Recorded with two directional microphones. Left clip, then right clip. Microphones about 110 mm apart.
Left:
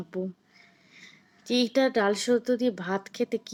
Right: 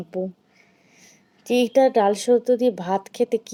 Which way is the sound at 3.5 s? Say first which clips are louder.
Right 7 dB; 55° left (ahead or behind).